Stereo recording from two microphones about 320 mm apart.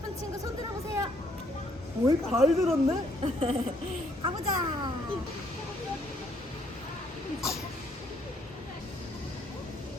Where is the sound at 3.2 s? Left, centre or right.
Centre.